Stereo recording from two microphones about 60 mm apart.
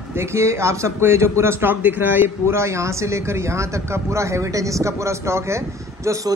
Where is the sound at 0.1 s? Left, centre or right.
Right.